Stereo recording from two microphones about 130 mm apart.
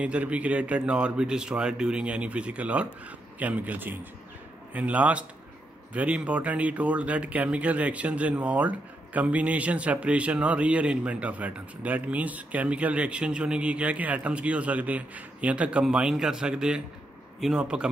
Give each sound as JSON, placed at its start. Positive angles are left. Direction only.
{"t": 0.0, "sound": "speech", "side_deg": -10}